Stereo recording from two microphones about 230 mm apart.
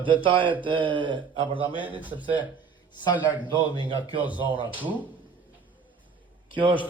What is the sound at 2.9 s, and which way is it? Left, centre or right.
Speech, centre.